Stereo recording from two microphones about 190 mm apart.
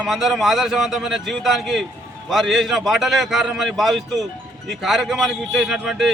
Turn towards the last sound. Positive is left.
turn(degrees=0)  # may be behind; listen again after turning